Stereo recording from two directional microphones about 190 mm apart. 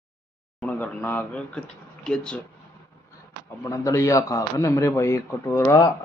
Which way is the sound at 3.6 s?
15° left (ahead or behind).